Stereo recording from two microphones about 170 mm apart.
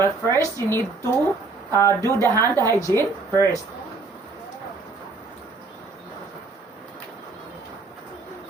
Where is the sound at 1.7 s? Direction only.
15° left (ahead or behind).